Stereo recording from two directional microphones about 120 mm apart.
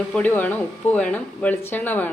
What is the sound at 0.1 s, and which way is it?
Speech, 15° left (ahead or behind).